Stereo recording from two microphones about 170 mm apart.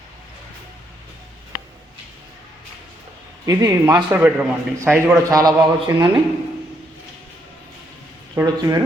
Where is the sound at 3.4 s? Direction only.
20° right (ahead or behind).